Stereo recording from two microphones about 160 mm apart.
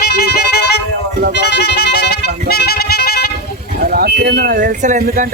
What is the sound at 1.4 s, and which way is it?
Music, 90° left.